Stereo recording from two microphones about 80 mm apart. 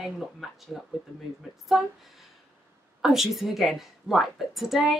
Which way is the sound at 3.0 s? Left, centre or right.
Centre.